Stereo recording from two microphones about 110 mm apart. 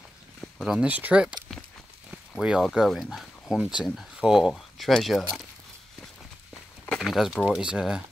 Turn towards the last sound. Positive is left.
turn(degrees=-5)  # may be behind; listen again after turning